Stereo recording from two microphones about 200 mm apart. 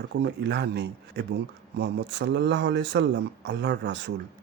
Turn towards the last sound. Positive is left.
turn(degrees=-60)  # may be behind; listen again after turning